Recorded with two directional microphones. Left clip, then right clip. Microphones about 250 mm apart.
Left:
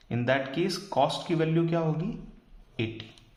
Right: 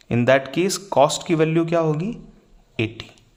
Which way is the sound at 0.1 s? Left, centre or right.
Right.